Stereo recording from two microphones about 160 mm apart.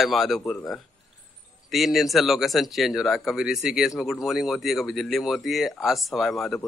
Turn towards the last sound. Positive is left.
turn(degrees=0)  # may be behind; listen again after turning